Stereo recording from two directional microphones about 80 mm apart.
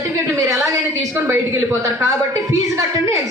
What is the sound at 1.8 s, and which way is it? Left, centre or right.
A woman's voice, right.